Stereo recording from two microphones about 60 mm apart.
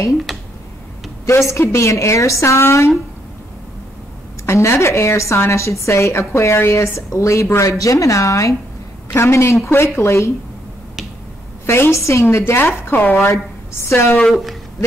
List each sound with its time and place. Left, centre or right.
0.3 s a sound: centre
1.5 s a woman's voice: left
4.5 s a woman's voice: left
7.6 s speech: left
9.1 s a woman's voice: left
11.6 s a woman's voice: left
14.1 s a woman's voice: centre